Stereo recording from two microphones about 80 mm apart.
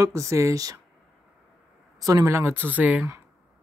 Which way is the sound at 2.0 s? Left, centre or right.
Right.